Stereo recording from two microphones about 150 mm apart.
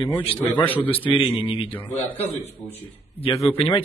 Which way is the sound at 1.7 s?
10° left (ahead or behind).